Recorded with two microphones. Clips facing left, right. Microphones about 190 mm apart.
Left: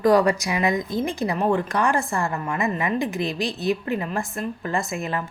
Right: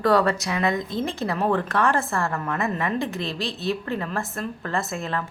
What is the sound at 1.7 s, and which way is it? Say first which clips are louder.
Speech: even; centre (ahead or behind).